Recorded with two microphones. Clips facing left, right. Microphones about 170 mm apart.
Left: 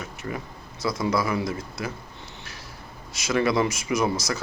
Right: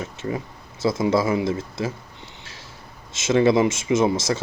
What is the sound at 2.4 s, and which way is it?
Vehicle, 25° right (ahead or behind).